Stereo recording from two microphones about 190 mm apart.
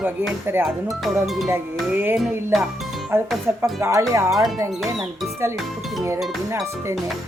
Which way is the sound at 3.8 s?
15° right (ahead or behind).